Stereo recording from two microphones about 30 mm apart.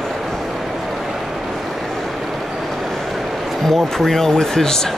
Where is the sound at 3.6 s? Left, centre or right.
Centre.